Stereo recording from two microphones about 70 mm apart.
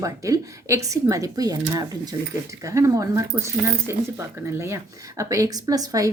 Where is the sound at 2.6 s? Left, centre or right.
Right.